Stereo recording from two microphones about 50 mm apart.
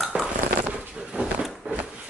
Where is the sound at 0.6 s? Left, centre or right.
Right.